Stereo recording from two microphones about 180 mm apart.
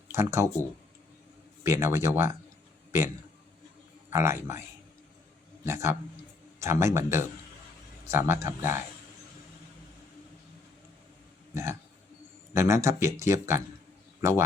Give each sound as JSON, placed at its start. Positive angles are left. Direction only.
{"t": 0.1, "sound": "speech", "side_deg": -15}
{"t": 1.6, "sound": "speech", "side_deg": -15}
{"t": 4.1, "sound": "speech", "side_deg": -15}
{"t": 5.6, "sound": "speech", "side_deg": -15}
{"t": 11.5, "sound": "speech", "side_deg": -15}